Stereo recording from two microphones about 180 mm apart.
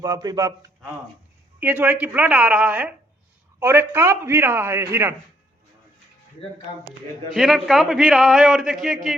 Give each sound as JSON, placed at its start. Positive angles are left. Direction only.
{"t": 0.0, "sound": "a man's voice", "side_deg": -20}
{"t": 1.5, "sound": "a man's voice", "side_deg": -10}
{"t": 7.3, "sound": "a man's voice", "side_deg": 0}